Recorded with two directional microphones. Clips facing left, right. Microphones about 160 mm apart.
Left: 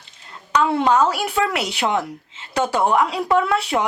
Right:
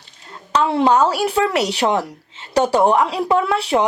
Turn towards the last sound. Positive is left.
turn(degrees=-30)  # may be behind; listen again after turning